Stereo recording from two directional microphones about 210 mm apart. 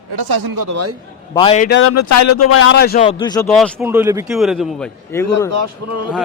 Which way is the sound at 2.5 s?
75° left (ahead or behind).